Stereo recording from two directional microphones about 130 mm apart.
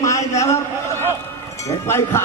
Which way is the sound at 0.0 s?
25° left (ahead or behind).